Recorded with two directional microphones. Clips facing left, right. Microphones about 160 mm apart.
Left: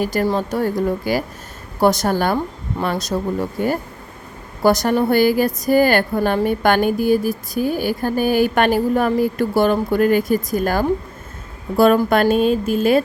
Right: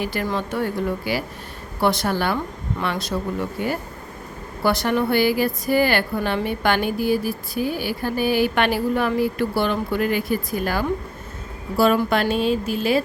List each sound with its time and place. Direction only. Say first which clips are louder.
0.0 s a woman's voice: left 6 dB; 40° left (ahead or behind)